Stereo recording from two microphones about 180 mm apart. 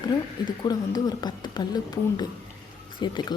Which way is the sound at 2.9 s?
25° left (ahead or behind).